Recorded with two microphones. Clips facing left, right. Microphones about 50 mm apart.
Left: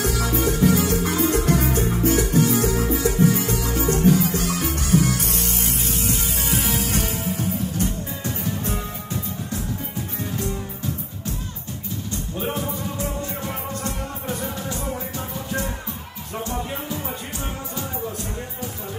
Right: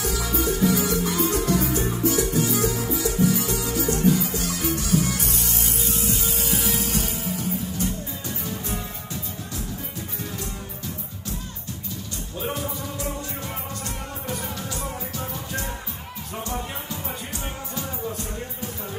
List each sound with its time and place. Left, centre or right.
0.0 s music: left